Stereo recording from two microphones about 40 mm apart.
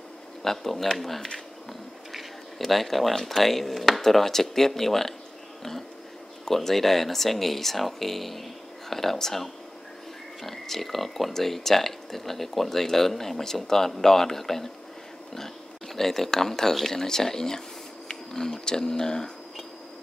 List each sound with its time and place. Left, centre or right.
0.4 s speech: centre
1.7 s a sound: centre
3.2 s speech: centre